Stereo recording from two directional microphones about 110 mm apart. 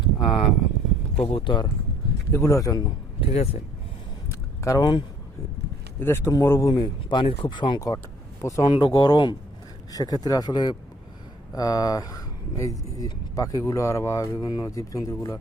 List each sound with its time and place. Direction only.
0.0 s a sound: 50° left (ahead or behind)
1.1 s speech: 65° left (ahead or behind)
1.5 s speech: 45° left (ahead or behind)
2.3 s speech: 25° left (ahead or behind)
3.2 s speech: 60° left (ahead or behind)
4.3 s a sound: 30° left (ahead or behind)
6.0 s speech: 20° left (ahead or behind); by 7.8 s 45° left (ahead or behind)
8.4 s speech: 30° left (ahead or behind)
8.7 s speech: 40° left (ahead or behind)